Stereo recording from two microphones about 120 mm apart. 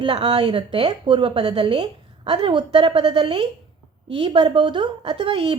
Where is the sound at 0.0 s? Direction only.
40° right (ahead or behind).